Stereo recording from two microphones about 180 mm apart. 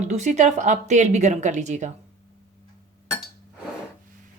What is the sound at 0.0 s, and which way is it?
Speech, 40° right (ahead or behind).